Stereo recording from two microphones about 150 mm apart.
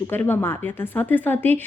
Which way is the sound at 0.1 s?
15° left (ahead or behind).